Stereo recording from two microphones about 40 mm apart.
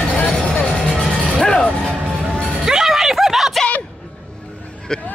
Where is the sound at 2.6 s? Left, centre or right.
Centre.